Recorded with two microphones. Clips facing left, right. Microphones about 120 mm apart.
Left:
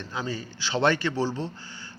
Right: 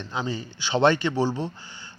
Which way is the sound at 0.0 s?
20° right (ahead or behind).